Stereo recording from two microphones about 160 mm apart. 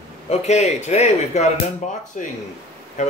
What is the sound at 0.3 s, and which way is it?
Speech, 45° left (ahead or behind).